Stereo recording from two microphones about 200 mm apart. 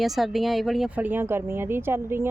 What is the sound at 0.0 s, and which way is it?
Speech, centre (ahead or behind).